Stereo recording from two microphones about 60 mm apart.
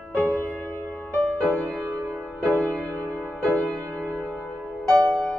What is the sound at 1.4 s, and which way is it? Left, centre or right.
Music, right.